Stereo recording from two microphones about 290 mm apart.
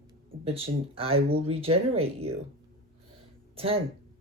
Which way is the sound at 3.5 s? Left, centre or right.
Centre.